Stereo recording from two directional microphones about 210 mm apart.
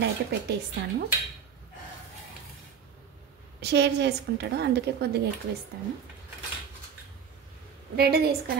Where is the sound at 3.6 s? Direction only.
55° right (ahead or behind).